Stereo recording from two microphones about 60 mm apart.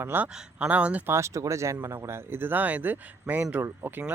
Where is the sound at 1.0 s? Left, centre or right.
Right.